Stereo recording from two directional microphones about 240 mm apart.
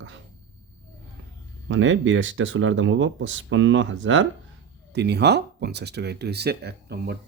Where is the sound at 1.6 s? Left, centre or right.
Right.